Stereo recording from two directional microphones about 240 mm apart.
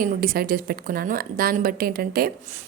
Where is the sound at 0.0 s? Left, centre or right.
Right.